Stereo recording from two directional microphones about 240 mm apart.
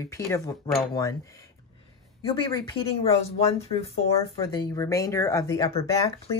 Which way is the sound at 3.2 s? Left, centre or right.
Left.